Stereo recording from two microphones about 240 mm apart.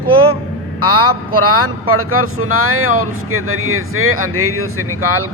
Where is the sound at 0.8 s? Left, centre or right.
Right.